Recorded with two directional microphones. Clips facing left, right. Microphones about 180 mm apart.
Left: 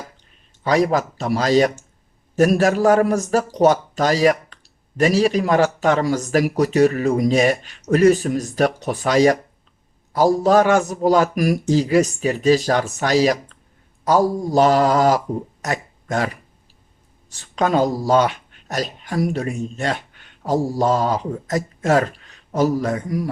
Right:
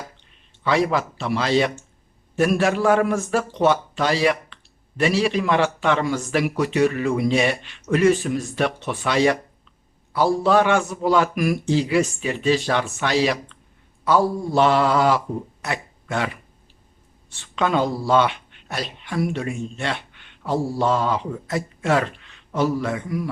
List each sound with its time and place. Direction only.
0.6 s a man's voice: 40° left (ahead or behind)